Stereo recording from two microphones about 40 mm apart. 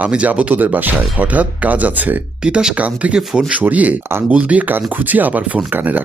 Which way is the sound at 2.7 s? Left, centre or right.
Right.